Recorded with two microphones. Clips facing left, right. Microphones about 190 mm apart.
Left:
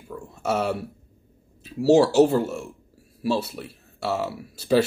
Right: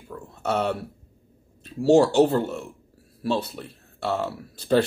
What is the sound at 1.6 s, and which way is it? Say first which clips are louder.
Speech: even; 5° left (ahead or behind).